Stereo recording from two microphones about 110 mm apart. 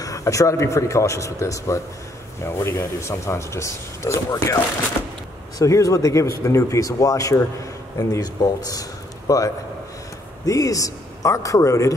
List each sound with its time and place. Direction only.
0.0 s speech: 30° left (ahead or behind)
5.6 s speech: 30° left (ahead or behind)